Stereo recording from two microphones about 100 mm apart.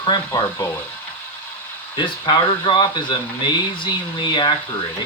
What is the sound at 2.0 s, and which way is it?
Speech, 50° left (ahead or behind).